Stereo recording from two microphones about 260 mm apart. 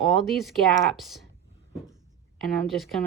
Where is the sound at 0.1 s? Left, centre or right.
Centre.